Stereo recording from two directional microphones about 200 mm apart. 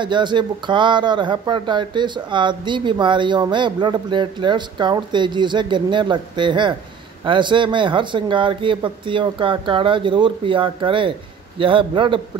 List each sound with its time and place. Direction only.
0.0 s speech: 25° right (ahead or behind)